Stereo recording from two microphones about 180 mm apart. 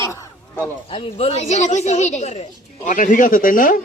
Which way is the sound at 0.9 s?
30° left (ahead or behind).